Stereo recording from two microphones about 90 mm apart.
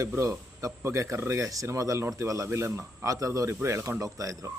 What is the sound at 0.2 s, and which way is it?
A man's voice, 35° right (ahead or behind).